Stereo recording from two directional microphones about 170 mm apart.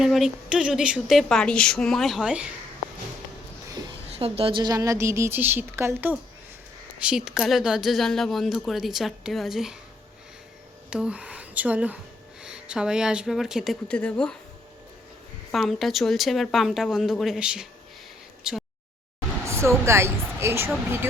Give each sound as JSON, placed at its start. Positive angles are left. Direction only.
{"t": 0.0, "sound": "a woman's voice", "side_deg": 0}
{"t": 4.2, "sound": "a woman's voice", "side_deg": -35}
{"t": 10.8, "sound": "a woman's voice", "side_deg": -5}
{"t": 15.5, "sound": "a woman's voice", "side_deg": 0}
{"t": 18.5, "sound": "a sound", "side_deg": -5}
{"t": 19.5, "sound": "speech", "side_deg": -15}